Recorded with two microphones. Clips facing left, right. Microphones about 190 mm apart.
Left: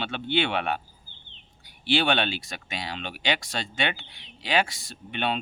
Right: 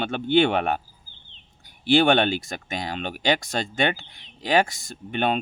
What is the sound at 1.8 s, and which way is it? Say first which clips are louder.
Speech: right 6 dB; 45° right (ahead or behind).